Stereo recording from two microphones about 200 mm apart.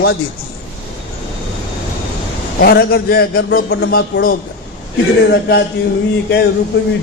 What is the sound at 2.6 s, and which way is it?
A man's voice, 50° left (ahead or behind).